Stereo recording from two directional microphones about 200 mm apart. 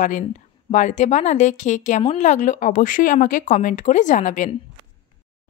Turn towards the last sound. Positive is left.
turn(degrees=40)  # may be behind; listen again after turning